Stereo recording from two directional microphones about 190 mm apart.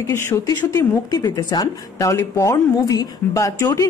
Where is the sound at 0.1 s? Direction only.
15° left (ahead or behind).